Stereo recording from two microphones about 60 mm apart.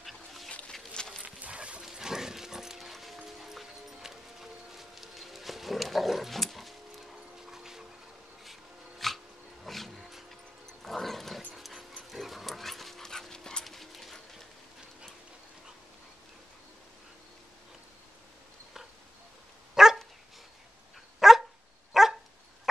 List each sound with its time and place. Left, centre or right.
0.0 s a sound: centre
0.5 s a sound: centre
0.9 s horse: centre
1.2 s dog: right
1.8 s music: centre
7.5 s a sound: centre
9.7 s music: centre
10.8 s dog: centre
19.7 s dog: centre
21.2 s dog: centre